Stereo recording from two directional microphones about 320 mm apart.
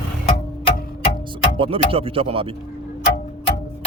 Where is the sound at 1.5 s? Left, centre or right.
Centre.